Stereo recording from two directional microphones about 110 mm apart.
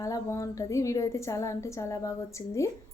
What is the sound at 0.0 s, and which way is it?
A woman's voice, 30° left (ahead or behind).